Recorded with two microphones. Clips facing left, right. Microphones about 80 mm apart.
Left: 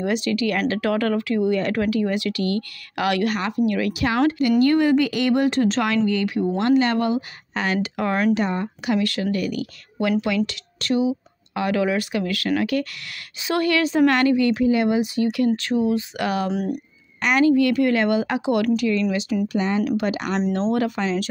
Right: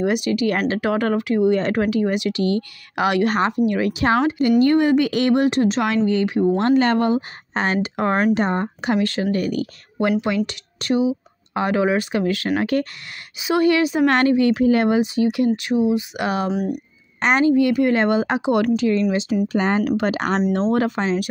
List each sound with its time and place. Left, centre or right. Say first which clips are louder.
0.0 s speech: right 3 dB; right
5.5 s speech: right 1 dB; right
10.2 s speech: right 1 dB; right
13.4 s speech: right 4 dB; centre
14.0 s speech: right 2 dB; right
14.6 s speech: right 2 dB; right
15.3 s speech: right 1 dB; centre
16.4 s speech: right 2 dB; centre
17.2 s speech: right 1 dB; right
19.6 s speech: right 2 dB; right
20.0 s speech: right 3 dB; right